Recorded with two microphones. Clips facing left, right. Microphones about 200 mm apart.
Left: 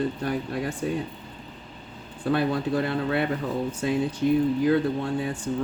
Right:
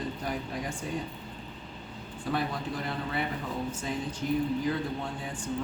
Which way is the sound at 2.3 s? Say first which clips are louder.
Left 8 dB; 65° left (ahead or behind).